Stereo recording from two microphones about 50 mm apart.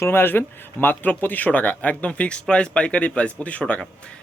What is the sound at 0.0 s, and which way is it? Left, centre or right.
Speech, left.